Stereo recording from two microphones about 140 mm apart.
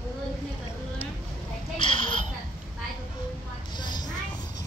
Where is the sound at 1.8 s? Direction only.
35° left (ahead or behind).